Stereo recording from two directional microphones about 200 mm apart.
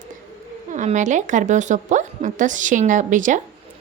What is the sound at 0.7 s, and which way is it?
A woman's voice, 40° right (ahead or behind).